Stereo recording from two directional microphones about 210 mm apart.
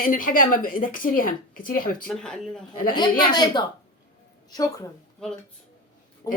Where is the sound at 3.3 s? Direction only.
20° left (ahead or behind).